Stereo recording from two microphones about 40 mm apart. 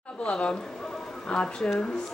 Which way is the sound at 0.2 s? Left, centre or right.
Left.